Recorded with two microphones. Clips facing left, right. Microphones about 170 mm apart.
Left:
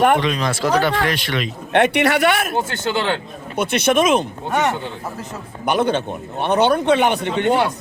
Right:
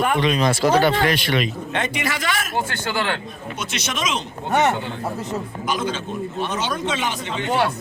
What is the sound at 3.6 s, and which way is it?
Speech, 55° left (ahead or behind).